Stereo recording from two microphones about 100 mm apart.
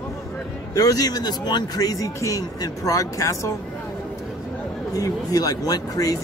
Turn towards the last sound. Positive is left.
turn(degrees=40)  # may be behind; listen again after turning